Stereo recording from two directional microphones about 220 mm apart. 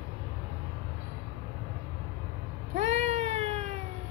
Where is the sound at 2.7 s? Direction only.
30° right (ahead or behind).